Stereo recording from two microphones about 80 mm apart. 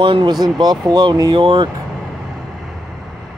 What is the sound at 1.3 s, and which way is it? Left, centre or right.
Speech, right.